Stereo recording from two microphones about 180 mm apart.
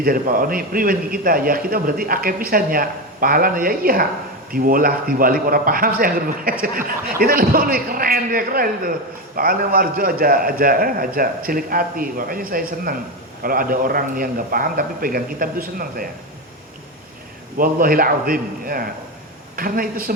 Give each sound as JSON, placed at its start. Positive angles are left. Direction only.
{"t": 0.0, "sound": "speech", "side_deg": -50}
{"t": 17.6, "sound": "speech", "side_deg": -50}